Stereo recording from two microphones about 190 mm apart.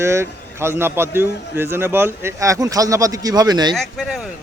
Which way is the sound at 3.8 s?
Centre (ahead or behind).